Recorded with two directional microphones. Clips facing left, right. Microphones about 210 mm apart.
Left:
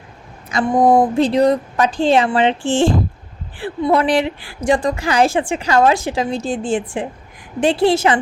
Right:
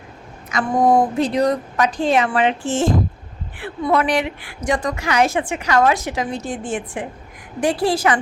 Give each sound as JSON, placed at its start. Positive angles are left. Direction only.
{"t": 0.5, "sound": "a woman's voice", "side_deg": 20}